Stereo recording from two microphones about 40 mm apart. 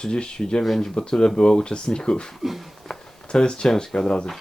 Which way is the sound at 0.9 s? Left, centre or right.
Left.